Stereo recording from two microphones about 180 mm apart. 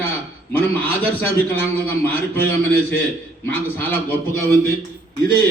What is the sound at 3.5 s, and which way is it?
Speech, 10° left (ahead or behind).